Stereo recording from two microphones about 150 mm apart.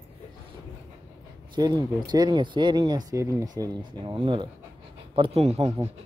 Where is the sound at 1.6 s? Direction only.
25° right (ahead or behind); by 5.7 s 45° right (ahead or behind).